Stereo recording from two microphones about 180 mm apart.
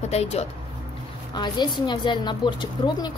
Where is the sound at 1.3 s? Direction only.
25° left (ahead or behind).